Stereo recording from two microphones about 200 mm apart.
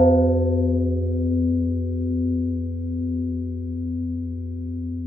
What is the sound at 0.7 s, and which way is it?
Singing bowl, centre (ahead or behind).